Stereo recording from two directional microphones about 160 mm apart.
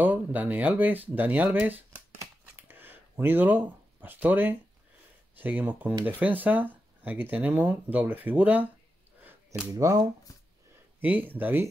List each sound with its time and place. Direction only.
0.0 s speech: 10° right (ahead or behind)
9.7 s speech: 25° right (ahead or behind)
11.0 s speech: 10° right (ahead or behind)